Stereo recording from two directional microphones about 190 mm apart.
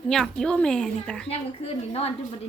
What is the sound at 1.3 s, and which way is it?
Speech, 30° left (ahead or behind).